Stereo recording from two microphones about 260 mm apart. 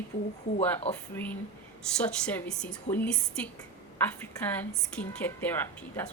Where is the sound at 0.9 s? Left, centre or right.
Left.